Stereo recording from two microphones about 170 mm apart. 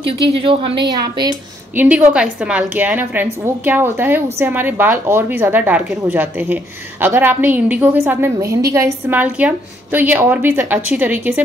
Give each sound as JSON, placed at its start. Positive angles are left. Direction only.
{"t": 0.4, "sound": "speech", "side_deg": -30}
{"t": 1.8, "sound": "a woman's voice", "side_deg": -10}